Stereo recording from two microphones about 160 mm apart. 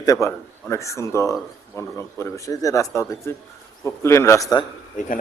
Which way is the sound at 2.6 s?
20° left (ahead or behind).